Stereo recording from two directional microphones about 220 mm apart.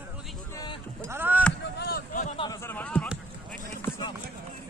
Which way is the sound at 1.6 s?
45° left (ahead or behind).